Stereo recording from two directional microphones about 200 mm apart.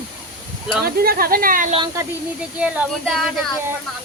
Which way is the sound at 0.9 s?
50° right (ahead or behind).